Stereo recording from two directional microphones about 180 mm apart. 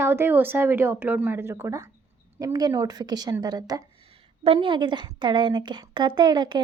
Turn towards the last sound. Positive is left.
turn(degrees=-25)  # may be behind; listen again after turning